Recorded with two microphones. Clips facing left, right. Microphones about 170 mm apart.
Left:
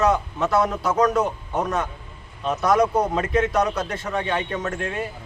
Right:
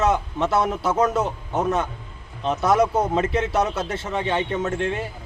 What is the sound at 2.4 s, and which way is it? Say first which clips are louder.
A man's voice: even; 25° right (ahead or behind).